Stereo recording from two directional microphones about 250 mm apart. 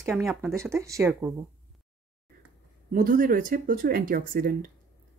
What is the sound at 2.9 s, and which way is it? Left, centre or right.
Speech, right.